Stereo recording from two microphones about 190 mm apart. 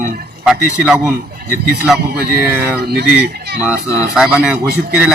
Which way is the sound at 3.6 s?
5° right (ahead or behind).